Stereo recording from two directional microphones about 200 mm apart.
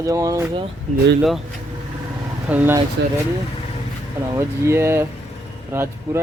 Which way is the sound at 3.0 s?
60° right (ahead or behind).